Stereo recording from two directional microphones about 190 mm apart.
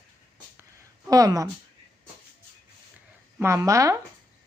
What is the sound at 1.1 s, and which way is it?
Speech, 20° right (ahead or behind).